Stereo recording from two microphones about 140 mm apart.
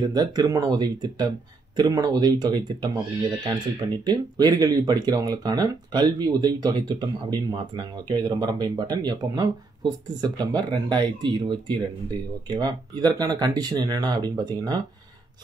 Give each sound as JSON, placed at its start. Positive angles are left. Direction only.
{"t": 0.1, "sound": "speech", "side_deg": -30}